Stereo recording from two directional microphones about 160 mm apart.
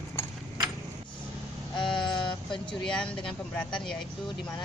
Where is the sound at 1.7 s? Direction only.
30° left (ahead or behind).